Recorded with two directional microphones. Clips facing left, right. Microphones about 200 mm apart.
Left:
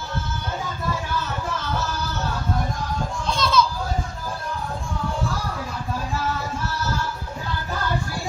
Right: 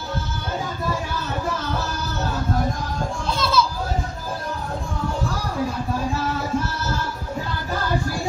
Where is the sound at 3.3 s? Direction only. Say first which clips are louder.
Left 1 dB; 5° right (ahead or behind).